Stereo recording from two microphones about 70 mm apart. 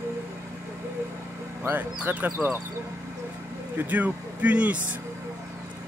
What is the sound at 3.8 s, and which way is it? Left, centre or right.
Speech, right.